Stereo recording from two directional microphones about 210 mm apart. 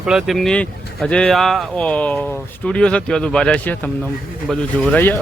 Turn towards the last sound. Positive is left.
turn(degrees=10)  # may be behind; listen again after turning